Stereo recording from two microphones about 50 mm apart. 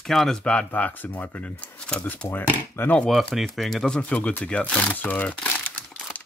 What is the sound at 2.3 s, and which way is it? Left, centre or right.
Speech, left.